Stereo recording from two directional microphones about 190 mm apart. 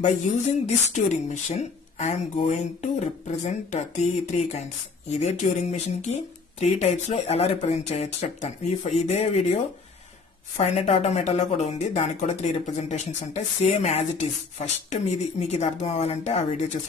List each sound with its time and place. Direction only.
0.7 s speech: 35° left (ahead or behind)
10.6 s speech: 35° left (ahead or behind)